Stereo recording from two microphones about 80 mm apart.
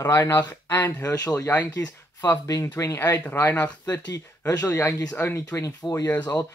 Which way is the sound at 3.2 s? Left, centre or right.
Left.